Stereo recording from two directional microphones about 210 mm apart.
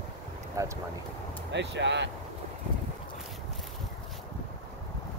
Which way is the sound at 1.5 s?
55° right (ahead or behind).